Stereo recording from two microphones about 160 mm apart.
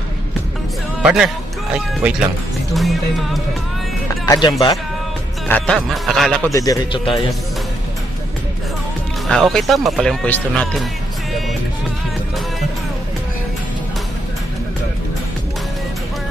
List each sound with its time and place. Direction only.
1.0 s speech: 5° right (ahead or behind)
2.7 s music: centre (ahead or behind)
4.3 s speech: 25° left (ahead or behind)
5.5 s speech: 5° left (ahead or behind)
6.5 s speech: 20° left (ahead or behind)
9.3 s speech: centre (ahead or behind)